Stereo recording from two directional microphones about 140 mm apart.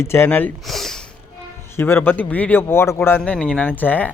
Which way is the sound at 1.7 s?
15° left (ahead or behind).